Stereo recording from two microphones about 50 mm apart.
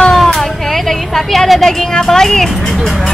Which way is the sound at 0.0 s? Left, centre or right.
Centre.